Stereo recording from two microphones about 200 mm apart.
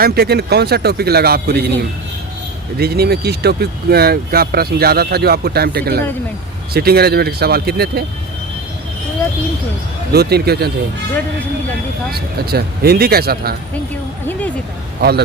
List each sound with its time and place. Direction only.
0.0 s speech: 50° right (ahead or behind)
2.7 s speech: 50° right (ahead or behind)
10.1 s speech: 55° right (ahead or behind)
12.1 s speech: 50° right (ahead or behind)